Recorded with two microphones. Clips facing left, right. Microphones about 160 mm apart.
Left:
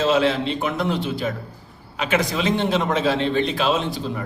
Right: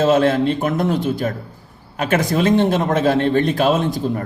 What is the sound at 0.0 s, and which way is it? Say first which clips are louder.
A man's voice: right 4 dB; 50° right (ahead or behind).